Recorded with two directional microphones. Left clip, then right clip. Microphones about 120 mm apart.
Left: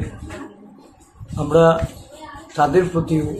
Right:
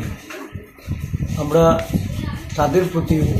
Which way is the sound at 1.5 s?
10° left (ahead or behind).